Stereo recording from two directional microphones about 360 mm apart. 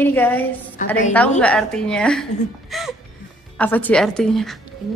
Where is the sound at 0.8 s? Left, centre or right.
Left.